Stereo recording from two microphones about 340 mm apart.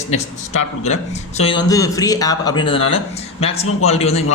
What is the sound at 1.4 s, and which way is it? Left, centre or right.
A man's voice, centre.